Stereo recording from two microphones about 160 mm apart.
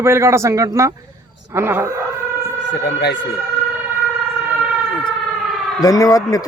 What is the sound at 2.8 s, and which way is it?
Speech, 85° left.